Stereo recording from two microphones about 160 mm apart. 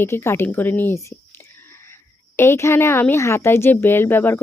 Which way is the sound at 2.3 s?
15° left (ahead or behind).